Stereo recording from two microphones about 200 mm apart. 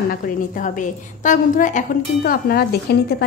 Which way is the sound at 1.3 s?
40° left (ahead or behind).